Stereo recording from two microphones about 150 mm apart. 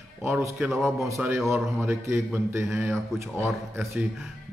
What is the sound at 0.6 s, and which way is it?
Speech, centre (ahead or behind).